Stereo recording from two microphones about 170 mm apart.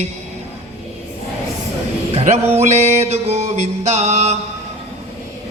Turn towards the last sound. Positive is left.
turn(degrees=-40)  # may be behind; listen again after turning